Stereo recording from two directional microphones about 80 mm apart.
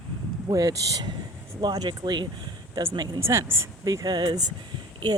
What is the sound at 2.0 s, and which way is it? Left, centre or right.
Speech, right.